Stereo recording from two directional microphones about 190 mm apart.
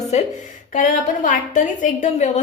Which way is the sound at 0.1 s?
35° left (ahead or behind).